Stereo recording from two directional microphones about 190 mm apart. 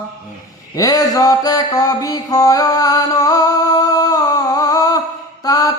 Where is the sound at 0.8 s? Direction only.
20° left (ahead or behind).